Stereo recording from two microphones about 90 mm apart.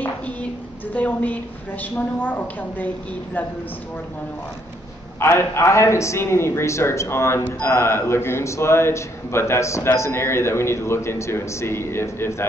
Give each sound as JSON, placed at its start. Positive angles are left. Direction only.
{"t": 0.9, "sound": "a woman's voice", "side_deg": 15}
{"t": 5.2, "sound": "a man's voice", "side_deg": 30}